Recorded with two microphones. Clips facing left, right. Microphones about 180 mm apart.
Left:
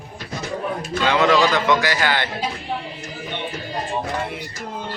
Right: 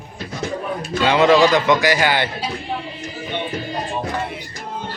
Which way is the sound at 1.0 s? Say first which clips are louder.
Right 4 dB; 20° right (ahead or behind).